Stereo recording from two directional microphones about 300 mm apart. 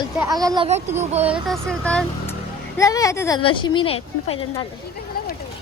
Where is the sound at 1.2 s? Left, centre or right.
Centre.